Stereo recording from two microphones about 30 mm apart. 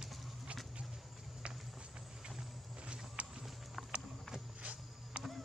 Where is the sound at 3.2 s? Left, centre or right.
Right.